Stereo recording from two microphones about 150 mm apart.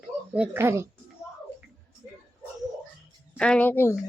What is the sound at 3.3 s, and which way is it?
Speech, 5° left (ahead or behind).